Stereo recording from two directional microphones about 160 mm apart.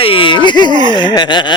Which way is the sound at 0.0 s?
35° left (ahead or behind).